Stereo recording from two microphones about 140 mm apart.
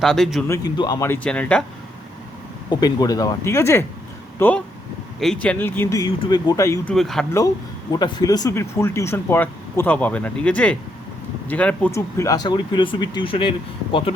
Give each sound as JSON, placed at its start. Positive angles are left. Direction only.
{"t": 0.0, "sound": "speech", "side_deg": 0}
{"t": 0.4, "sound": "speech", "side_deg": 20}
{"t": 1.0, "sound": "speech", "side_deg": 10}
{"t": 2.6, "sound": "speech", "side_deg": 30}
{"t": 6.8, "sound": "speech", "side_deg": 0}
{"t": 7.3, "sound": "speech", "side_deg": 25}
{"t": 11.9, "sound": "speech", "side_deg": 20}